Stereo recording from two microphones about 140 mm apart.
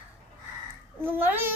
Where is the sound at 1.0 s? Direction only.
15° right (ahead or behind).